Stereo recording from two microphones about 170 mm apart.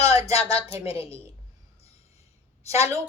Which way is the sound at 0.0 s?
35° left (ahead or behind).